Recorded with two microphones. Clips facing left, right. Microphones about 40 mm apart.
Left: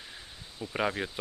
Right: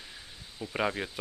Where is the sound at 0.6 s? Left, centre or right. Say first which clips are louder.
Even; centre.